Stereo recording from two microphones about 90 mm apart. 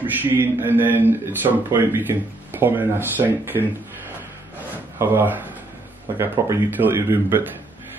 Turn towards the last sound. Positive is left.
turn(degrees=-25)  # may be behind; listen again after turning